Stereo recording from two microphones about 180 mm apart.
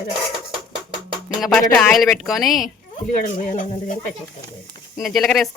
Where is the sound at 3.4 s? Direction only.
45° left (ahead or behind).